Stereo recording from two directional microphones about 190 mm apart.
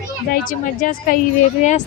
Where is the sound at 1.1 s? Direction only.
45° left (ahead or behind).